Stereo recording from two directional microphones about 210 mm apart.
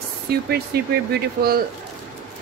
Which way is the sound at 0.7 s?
50° right (ahead or behind).